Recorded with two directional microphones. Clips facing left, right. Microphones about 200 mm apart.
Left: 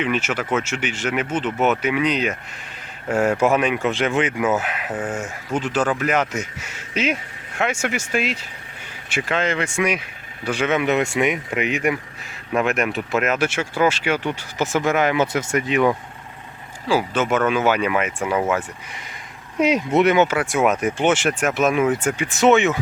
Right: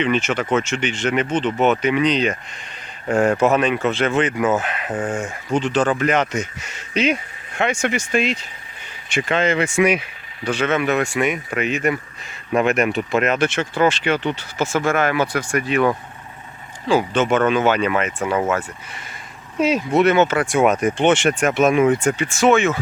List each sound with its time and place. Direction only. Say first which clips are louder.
0.0 s speech: right 3 dB; 5° left (ahead or behind)
10.5 s speech: even; 15° left (ahead or behind)
12.5 s speech: right 3 dB; centre (ahead or behind); by 15.9 s 20° left (ahead or behind)
16.9 s speech: right 2 dB; 5° left (ahead or behind)
19.5 s speech: even; 15° left (ahead or behind)
22.3 s speech: left 1 dB; 20° left (ahead or behind)